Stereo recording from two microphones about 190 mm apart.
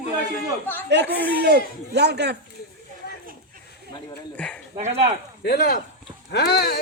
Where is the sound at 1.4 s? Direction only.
60° right (ahead or behind).